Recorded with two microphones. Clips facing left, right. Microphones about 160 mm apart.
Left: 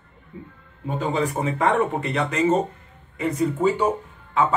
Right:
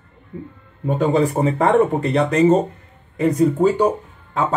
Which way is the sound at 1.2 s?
35° right (ahead or behind).